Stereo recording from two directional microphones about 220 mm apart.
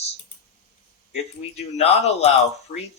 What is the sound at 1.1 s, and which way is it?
Speech, 30° left (ahead or behind).